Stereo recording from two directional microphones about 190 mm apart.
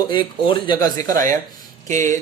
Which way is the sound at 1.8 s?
40° right (ahead or behind).